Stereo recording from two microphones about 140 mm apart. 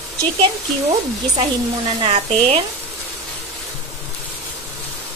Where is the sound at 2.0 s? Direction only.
45° right (ahead or behind).